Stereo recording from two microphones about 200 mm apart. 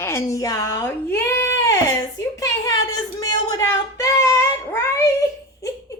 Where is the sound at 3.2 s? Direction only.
15° left (ahead or behind).